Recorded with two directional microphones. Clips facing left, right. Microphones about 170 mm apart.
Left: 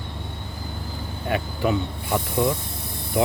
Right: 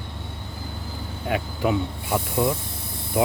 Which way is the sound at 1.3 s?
10° right (ahead or behind).